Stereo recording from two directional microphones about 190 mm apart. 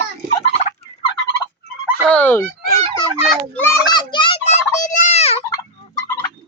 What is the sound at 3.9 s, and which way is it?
Turkey, 25° left (ahead or behind).